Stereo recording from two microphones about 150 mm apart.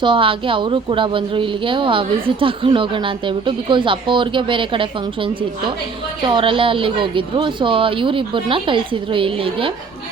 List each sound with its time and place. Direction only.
0.0 s a woman's voice: 35° right (ahead or behind)